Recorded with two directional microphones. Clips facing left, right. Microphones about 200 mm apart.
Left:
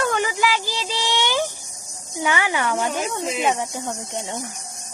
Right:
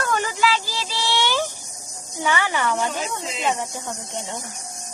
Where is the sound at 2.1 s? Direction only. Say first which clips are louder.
Left 1 dB; 15° left (ahead or behind).